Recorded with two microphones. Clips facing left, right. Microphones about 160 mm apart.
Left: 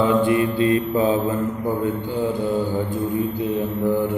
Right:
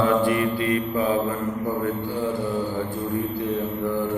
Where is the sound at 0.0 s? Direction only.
20° left (ahead or behind).